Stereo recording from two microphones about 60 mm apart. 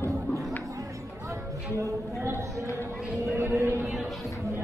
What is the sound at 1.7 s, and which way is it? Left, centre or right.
Speech, right.